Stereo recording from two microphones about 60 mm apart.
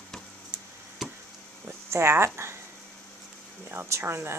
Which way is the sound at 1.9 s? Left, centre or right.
Right.